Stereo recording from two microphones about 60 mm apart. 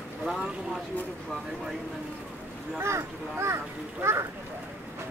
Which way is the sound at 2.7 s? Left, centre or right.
Right.